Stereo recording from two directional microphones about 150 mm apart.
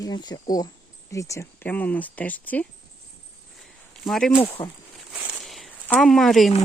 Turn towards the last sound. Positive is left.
turn(degrees=0)  # may be behind; listen again after turning